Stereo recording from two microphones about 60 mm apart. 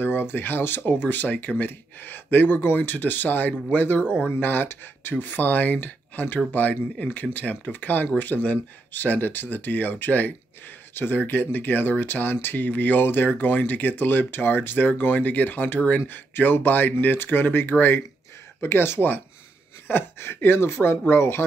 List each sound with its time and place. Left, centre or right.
0.0 s speech: left
4.0 s speech: centre
4.4 s speech: left